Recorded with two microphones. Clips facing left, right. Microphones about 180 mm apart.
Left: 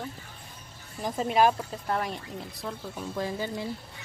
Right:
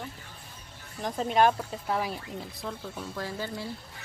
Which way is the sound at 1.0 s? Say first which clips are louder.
Even; 5° left (ahead or behind).